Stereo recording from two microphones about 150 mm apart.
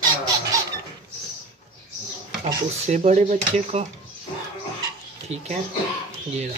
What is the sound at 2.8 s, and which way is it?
Speech, 50° right (ahead or behind).